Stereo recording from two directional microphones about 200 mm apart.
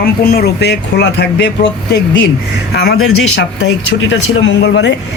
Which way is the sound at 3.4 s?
70° left (ahead or behind).